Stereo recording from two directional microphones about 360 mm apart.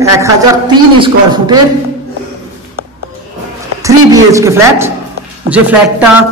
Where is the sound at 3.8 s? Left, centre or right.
Centre.